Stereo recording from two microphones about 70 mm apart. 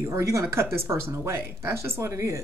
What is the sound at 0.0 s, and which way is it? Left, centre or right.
A woman's voice, right.